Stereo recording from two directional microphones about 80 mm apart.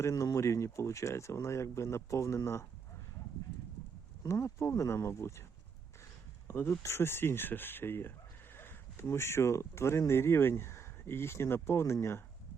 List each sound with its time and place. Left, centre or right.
0.0 s speech: left
4.2 s speech: left
6.5 s speech: left